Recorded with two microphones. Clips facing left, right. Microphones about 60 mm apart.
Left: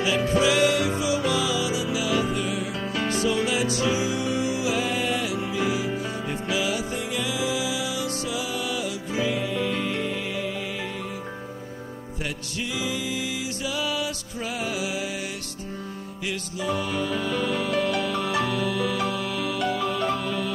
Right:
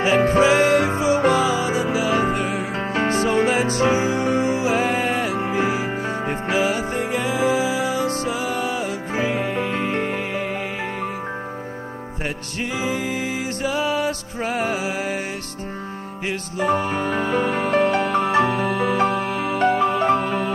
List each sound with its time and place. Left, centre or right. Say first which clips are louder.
0.0 s music: right 6 dB; right
12.7 s music: right 5 dB; right
16.3 s music: right 7 dB; right